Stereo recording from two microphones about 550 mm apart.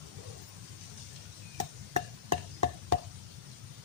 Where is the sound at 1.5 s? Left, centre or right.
Right.